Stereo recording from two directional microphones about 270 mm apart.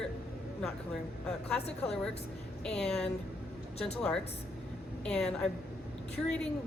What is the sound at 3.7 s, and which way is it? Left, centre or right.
Speech, left.